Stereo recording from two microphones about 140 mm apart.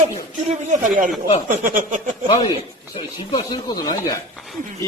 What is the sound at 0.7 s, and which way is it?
Speech, 65° right (ahead or behind).